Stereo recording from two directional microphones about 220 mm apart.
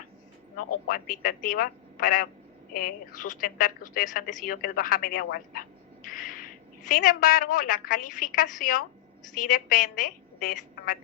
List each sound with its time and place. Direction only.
0.9 s a woman's voice: 40° left (ahead or behind)